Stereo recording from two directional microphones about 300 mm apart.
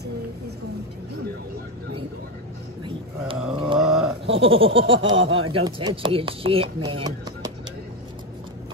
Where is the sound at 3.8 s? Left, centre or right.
Centre.